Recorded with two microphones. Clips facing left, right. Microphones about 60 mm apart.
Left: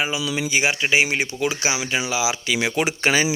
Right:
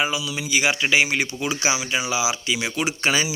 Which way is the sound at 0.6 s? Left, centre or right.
Centre.